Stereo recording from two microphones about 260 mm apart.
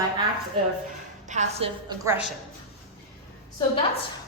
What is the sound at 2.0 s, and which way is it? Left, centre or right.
Speech, centre.